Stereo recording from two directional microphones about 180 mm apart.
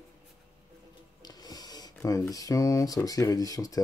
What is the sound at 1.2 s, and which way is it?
Speech, 20° left (ahead or behind).